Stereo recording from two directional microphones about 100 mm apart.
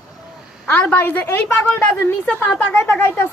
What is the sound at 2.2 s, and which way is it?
A woman's voice, 15° left (ahead or behind).